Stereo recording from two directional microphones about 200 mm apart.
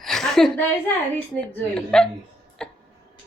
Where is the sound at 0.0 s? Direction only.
Centre (ahead or behind).